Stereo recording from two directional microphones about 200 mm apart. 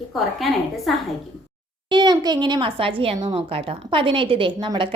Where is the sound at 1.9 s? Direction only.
20° right (ahead or behind).